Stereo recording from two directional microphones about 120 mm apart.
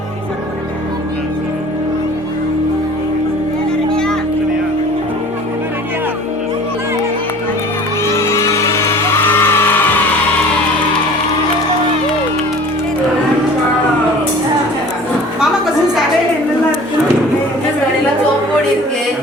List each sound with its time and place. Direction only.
8.0 s music: 25° left (ahead or behind)